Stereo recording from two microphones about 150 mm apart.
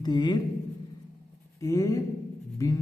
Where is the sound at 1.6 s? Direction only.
20° left (ahead or behind).